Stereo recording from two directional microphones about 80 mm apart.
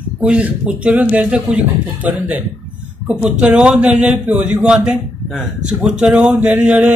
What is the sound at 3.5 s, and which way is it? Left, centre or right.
A man's voice, centre.